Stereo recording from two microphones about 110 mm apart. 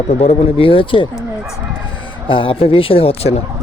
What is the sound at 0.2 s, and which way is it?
Speech, 65° left (ahead or behind).